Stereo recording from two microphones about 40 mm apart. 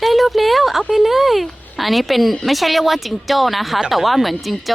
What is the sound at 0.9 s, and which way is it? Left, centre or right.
Speech, centre.